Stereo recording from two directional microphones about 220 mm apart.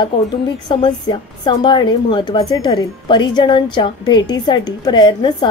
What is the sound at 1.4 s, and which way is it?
A woman's voice, 20° left (ahead or behind).